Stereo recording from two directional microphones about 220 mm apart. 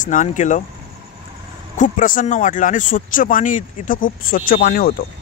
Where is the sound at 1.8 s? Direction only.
35° left (ahead or behind).